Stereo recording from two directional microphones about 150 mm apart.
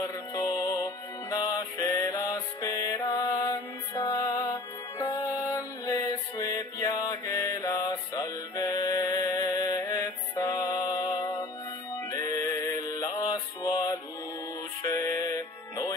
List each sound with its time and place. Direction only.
0.3 s music: 25° left (ahead or behind)
12.1 s mantra: 20° left (ahead or behind)
14.8 s music: 25° left (ahead or behind)